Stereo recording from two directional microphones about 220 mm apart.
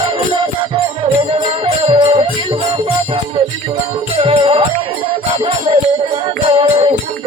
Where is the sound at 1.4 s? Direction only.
25° right (ahead or behind).